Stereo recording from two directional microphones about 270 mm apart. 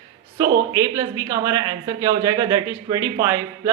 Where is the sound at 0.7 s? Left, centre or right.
Centre.